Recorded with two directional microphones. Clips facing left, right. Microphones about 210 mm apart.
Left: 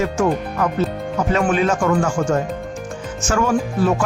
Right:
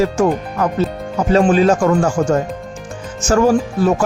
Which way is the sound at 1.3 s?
35° right (ahead or behind).